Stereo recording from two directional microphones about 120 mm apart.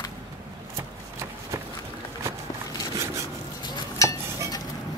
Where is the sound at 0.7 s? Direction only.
25° right (ahead or behind).